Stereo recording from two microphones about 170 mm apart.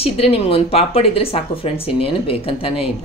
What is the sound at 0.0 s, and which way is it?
A woman's voice, 35° left (ahead or behind).